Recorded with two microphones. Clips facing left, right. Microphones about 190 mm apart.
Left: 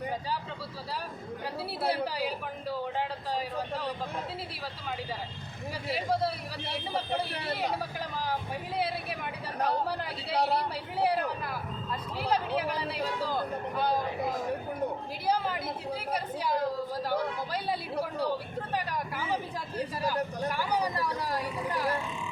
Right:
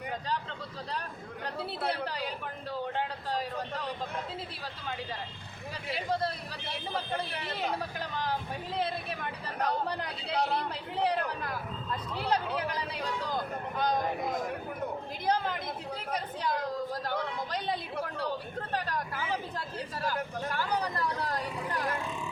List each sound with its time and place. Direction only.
1.9 s speech: 5° left (ahead or behind)
5.9 s speech: 10° left (ahead or behind)
7.5 s speech: 5° left (ahead or behind)
10.3 s speech: 35° left (ahead or behind)
10.9 s speech: 10° left (ahead or behind)
15.3 s speech: 5° left (ahead or behind)
20.5 s speech: 10° left (ahead or behind)